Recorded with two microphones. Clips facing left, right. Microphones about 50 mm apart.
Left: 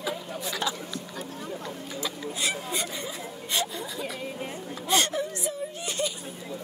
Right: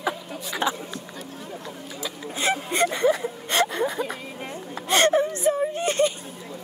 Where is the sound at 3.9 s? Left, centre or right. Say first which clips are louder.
Right 6 dB; right.